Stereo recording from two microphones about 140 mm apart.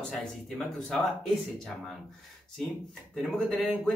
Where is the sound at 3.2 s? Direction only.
5° left (ahead or behind).